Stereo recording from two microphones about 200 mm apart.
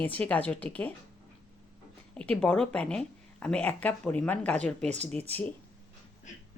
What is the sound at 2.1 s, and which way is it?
Speech, 5° left (ahead or behind).